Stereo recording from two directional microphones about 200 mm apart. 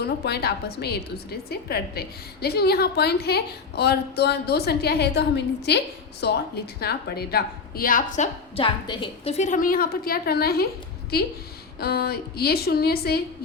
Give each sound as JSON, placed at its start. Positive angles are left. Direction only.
{"t": 0.0, "sound": "a woman's voice", "side_deg": 55}
{"t": 11.8, "sound": "a woman's voice", "side_deg": 50}